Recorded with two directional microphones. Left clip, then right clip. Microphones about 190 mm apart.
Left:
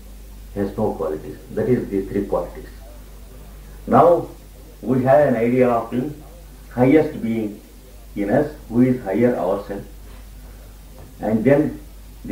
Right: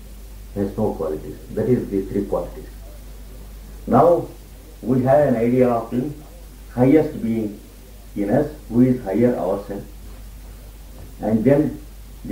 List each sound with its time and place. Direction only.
0.6 s speech: 25° right (ahead or behind)
3.9 s speech: 30° right (ahead or behind)
11.1 s speech: 30° right (ahead or behind)